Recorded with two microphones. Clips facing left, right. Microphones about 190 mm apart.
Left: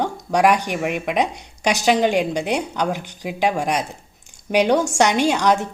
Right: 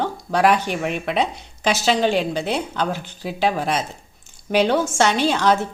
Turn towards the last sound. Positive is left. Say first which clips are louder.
# left 1 dB
turn(degrees=15)  # may be behind; listen again after turning